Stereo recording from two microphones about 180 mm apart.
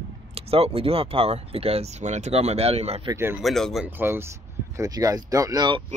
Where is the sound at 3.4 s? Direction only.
Centre (ahead or behind).